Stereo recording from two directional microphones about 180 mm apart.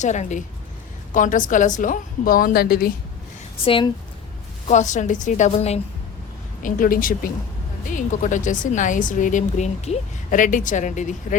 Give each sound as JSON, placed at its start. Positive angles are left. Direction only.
{"t": 0.0, "sound": "a woman's voice", "side_deg": 40}
{"t": 3.6, "sound": "speech", "side_deg": 30}
{"t": 4.7, "sound": "a woman's voice", "side_deg": 40}
{"t": 6.6, "sound": "a woman's voice", "side_deg": 50}